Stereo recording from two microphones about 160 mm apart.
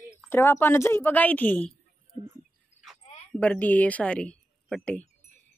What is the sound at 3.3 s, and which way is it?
A woman's voice, 10° left (ahead or behind).